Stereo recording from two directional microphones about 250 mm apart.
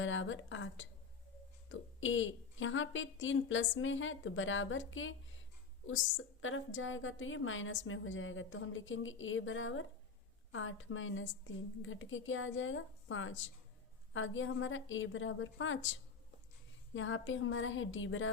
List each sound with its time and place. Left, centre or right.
0.0 s a woman's voice: left